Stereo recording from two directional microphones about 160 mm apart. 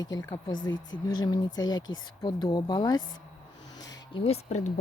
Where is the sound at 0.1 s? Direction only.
25° left (ahead or behind).